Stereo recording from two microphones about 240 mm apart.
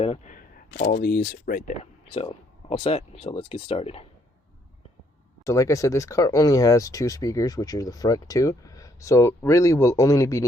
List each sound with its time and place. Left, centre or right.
0.0 s speech: left
0.3 s speech: left
1.8 s speech: left
5.5 s speech: centre